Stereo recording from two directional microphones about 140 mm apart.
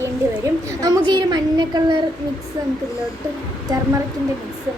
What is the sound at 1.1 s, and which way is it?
Speech, 30° right (ahead or behind).